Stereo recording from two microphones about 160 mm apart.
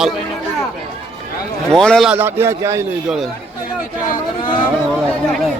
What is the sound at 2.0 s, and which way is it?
Speech, 15° right (ahead or behind).